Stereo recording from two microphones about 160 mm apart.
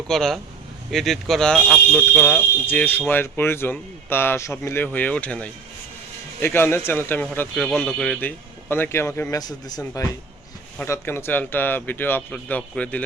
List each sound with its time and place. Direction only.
0.1 s speech: 5° left (ahead or behind)